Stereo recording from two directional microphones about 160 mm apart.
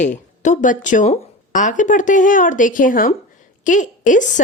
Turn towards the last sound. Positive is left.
turn(degrees=55)  # may be behind; listen again after turning